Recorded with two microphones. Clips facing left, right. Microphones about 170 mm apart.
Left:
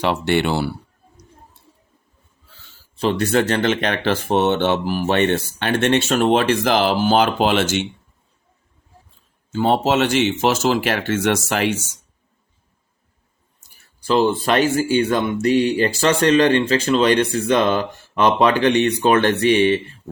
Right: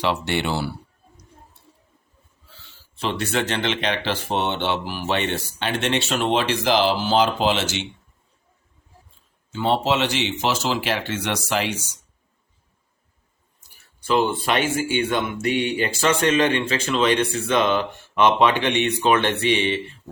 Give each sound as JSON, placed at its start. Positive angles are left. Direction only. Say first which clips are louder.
{"t": 0.0, "sound": "speech", "louder": "left 5 dB", "side_deg": 50}
{"t": 3.0, "sound": "speech", "louder": "left 6 dB", "side_deg": 40}
{"t": 9.5, "sound": "speech", "louder": "left 4 dB", "side_deg": 45}
{"t": 14.0, "sound": "speech", "louder": "left 4 dB", "side_deg": 35}